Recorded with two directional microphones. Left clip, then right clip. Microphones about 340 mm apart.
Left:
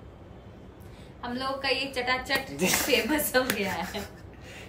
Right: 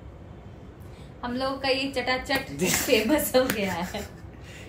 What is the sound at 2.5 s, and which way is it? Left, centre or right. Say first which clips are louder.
Speech: even; centre.